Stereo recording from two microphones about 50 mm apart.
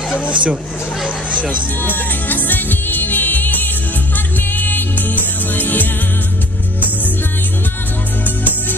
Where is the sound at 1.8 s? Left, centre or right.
Left.